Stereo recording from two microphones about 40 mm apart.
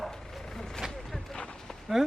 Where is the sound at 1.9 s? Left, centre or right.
Centre.